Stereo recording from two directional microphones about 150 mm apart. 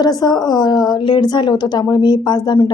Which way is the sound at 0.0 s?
25° left (ahead or behind).